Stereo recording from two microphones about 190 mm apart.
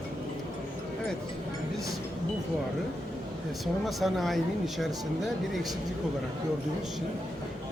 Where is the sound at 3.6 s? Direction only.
Centre (ahead or behind).